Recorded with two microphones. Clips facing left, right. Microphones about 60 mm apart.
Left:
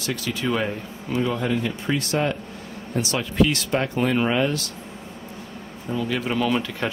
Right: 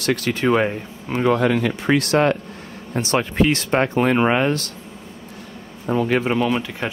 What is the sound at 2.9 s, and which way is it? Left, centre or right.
Speech, right.